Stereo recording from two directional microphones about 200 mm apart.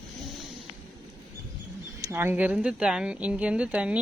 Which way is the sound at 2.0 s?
10° right (ahead or behind).